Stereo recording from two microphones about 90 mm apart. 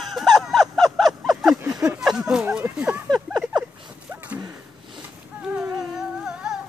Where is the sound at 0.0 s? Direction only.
Centre (ahead or behind).